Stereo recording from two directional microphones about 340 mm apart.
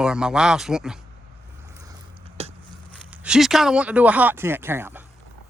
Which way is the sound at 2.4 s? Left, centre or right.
Centre.